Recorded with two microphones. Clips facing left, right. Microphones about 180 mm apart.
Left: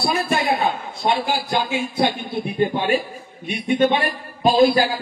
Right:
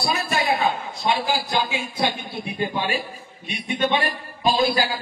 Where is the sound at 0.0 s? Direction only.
50° left (ahead or behind).